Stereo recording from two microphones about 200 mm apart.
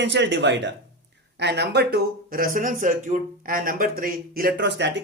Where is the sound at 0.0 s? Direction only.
60° right (ahead or behind).